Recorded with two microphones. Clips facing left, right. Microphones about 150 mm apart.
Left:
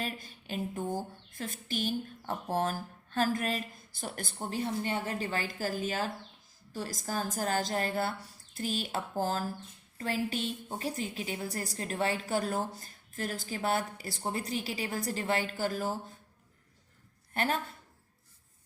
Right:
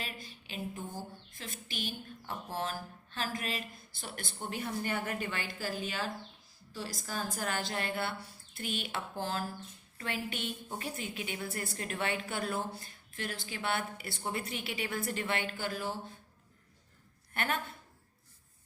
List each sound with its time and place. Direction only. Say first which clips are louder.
0.0 s a woman's voice: left 6 dB; 45° left (ahead or behind)
17.3 s a woman's voice: left 3 dB; 35° left (ahead or behind)